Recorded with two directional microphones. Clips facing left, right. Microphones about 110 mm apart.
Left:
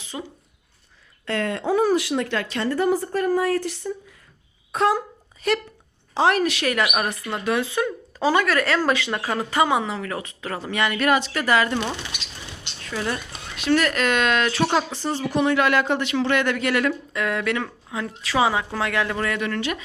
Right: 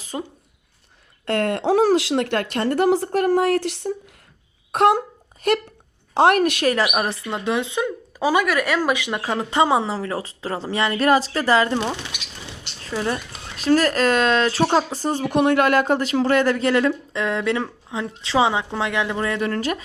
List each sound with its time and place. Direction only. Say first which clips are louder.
0.0 s dog: right 4 dB; 45° right (ahead or behind)
1.2 s speech: right 4 dB; 60° right (ahead or behind); by 4.1 s 75° right (ahead or behind)
4.7 s a sound: right 4 dB; 65° right (ahead or behind)
6.1 s a woman's voice: right 4 dB; 60° right (ahead or behind)
6.7 s speech: right 3 dB; 30° right (ahead or behind)
11.9 s speech: right 2 dB; 10° right (ahead or behind)
12.8 s speech: right 3 dB; 25° right (ahead or behind)
13.6 s speech: right 3 dB; 35° right (ahead or behind)
19.4 s speech: right 3 dB; 35° right (ahead or behind)